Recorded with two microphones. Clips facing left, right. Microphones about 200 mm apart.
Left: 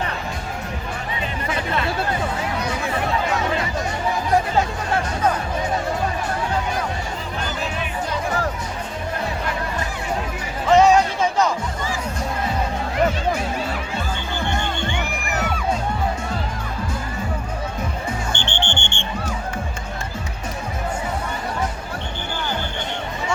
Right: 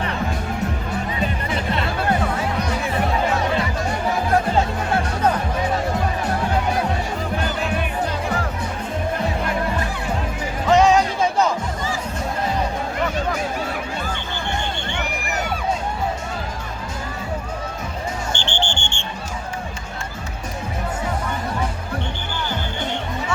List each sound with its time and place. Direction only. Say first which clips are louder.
10.7 s music: left 1 dB; centre (ahead or behind)
18.3 s music: even; 60° left (ahead or behind)